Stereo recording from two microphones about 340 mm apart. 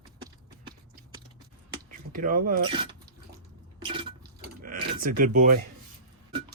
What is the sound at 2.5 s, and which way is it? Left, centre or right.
Speech, centre.